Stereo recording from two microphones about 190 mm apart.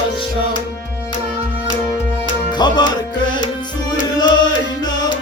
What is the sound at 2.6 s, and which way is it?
Music, 25° left (ahead or behind).